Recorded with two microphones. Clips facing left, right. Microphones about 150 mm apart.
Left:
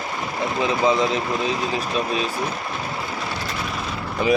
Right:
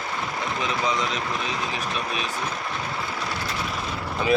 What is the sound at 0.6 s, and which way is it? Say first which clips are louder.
Speech: left 7 dB; 25° left (ahead or behind).